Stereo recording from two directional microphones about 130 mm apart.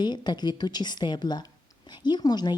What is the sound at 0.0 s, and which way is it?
Speech, 35° left (ahead or behind).